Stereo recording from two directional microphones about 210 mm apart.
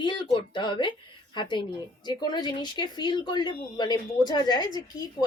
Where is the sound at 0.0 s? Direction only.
20° left (ahead or behind).